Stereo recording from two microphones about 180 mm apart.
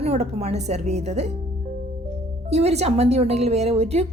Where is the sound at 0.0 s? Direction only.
35° right (ahead or behind).